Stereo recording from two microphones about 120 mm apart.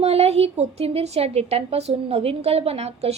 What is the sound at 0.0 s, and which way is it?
A woman's voice, 60° right (ahead or behind).